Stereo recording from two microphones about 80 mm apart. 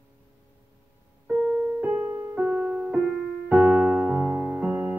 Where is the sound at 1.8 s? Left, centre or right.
Centre.